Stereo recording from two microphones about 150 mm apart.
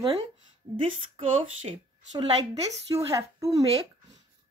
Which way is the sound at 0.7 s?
40° right (ahead or behind).